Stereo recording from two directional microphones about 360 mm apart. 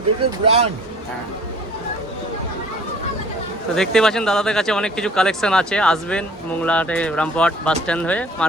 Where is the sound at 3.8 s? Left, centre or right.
Centre.